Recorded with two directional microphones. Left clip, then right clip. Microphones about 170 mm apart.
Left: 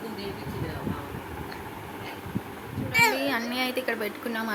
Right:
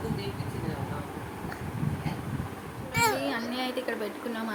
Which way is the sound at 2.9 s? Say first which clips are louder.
Left 4 dB; 25° right (ahead or behind).